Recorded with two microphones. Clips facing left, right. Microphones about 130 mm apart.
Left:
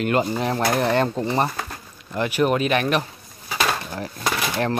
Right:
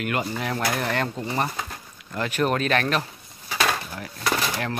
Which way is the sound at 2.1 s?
10° left (ahead or behind).